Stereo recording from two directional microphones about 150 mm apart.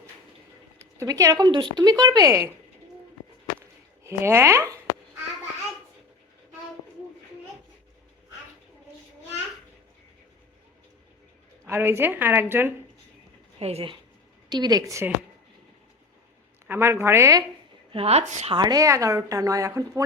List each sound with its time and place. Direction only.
0.8 s speech: 20° right (ahead or behind)
4.0 s a woman's voice: 15° right (ahead or behind)
11.6 s a woman's voice: 15° right (ahead or behind)
13.6 s a woman's voice: 40° right (ahead or behind)
14.5 s speech: 25° right (ahead or behind)
16.6 s a woman's voice: 15° right (ahead or behind)
17.9 s a woman's voice: 45° right (ahead or behind)
18.5 s speech: 25° right (ahead or behind)